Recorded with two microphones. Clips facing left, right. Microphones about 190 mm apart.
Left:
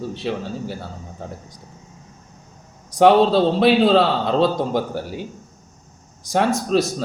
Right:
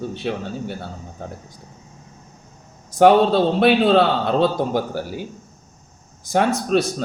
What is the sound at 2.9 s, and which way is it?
A man's voice, centre (ahead or behind).